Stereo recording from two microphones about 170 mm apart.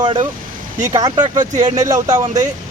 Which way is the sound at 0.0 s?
25° right (ahead or behind).